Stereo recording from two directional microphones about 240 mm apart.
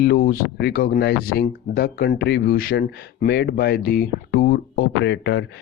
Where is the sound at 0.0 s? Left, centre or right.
Left.